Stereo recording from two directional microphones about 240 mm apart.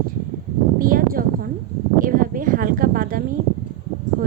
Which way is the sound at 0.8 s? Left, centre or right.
Right.